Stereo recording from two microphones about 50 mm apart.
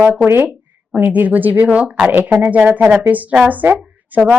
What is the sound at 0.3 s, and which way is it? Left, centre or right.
Speech, right.